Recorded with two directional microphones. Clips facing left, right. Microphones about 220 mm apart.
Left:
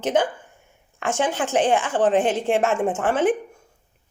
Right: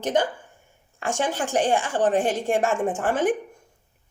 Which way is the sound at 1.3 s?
10° right (ahead or behind).